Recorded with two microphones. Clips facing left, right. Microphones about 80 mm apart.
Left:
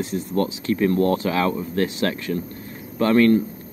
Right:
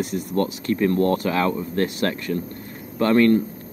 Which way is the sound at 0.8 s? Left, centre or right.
Right.